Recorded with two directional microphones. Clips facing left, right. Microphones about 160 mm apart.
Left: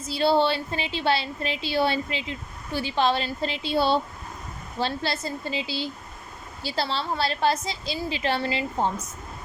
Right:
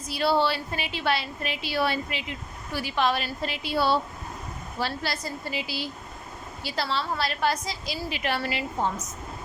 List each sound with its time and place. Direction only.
0.0 s a woman's voice: 25° left (ahead or behind)